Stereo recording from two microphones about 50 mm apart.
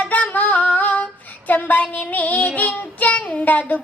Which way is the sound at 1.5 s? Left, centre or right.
Left.